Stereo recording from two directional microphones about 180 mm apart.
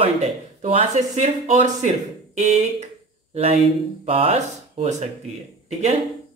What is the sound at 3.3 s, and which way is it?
Speech, 35° right (ahead or behind).